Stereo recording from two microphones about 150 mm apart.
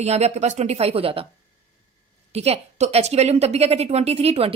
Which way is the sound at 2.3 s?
45° right (ahead or behind).